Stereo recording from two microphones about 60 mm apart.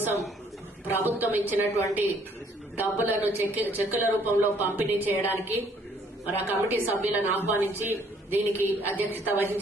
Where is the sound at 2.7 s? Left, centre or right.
Right.